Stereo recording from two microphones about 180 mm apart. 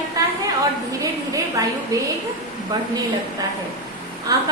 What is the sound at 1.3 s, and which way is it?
Speech, 20° right (ahead or behind).